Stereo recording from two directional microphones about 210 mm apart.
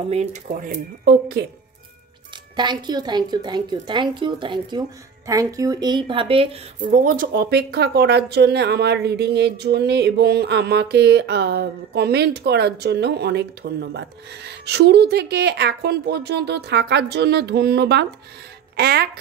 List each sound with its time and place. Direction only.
0.1 s speech: 30° right (ahead or behind)
1.0 s a woman's voice: 50° right (ahead or behind)
2.5 s a woman's voice: 20° right (ahead or behind); by 19.0 s 50° right (ahead or behind)